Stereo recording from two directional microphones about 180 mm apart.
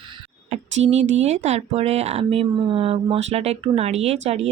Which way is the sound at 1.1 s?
40° right (ahead or behind).